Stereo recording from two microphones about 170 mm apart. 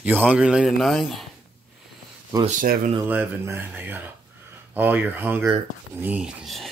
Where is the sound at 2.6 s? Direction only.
55° right (ahead or behind).